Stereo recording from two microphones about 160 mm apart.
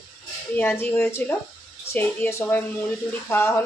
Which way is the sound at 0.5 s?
10° left (ahead or behind).